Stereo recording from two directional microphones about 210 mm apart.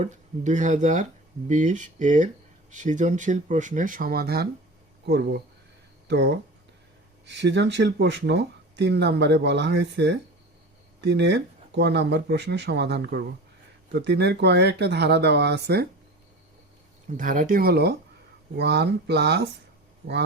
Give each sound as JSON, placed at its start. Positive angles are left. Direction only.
{"t": 0.0, "sound": "speech", "side_deg": -35}
{"t": 17.2, "sound": "speech", "side_deg": -40}